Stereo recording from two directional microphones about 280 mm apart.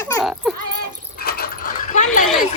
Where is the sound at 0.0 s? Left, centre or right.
Centre.